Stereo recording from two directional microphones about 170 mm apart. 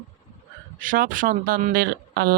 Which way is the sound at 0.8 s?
55° right (ahead or behind).